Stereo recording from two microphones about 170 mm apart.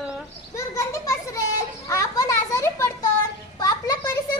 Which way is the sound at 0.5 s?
15° left (ahead or behind).